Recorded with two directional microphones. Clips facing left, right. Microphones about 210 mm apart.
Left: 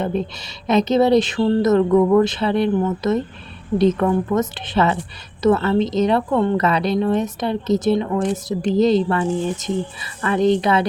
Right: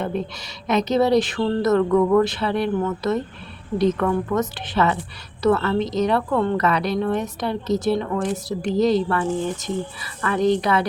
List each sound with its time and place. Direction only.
0.0 s a woman's voice: 25° left (ahead or behind)